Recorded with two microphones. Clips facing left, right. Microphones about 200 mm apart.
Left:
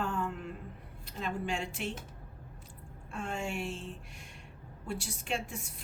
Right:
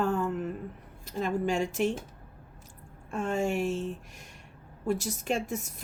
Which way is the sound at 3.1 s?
45° right (ahead or behind).